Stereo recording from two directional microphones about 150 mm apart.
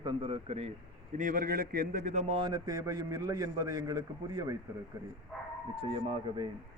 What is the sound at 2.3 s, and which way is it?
A man's voice, 30° right (ahead or behind).